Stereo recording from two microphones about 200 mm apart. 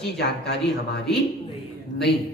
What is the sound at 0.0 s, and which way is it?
Speech, 55° left (ahead or behind).